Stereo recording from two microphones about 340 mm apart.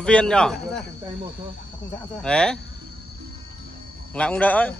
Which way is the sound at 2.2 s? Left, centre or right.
Centre.